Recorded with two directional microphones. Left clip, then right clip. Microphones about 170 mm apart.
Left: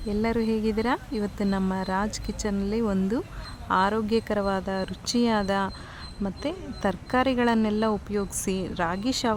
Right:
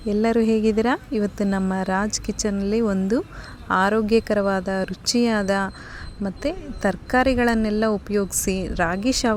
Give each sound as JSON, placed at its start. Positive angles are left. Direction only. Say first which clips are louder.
{"t": 0.1, "sound": "speech", "louder": "right 7 dB", "side_deg": -25}